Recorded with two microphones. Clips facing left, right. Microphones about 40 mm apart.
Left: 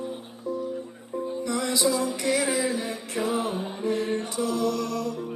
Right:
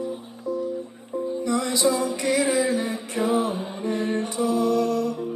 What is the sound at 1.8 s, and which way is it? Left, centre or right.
Music, right.